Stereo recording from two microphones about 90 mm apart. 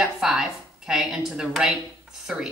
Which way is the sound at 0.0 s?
5° right (ahead or behind).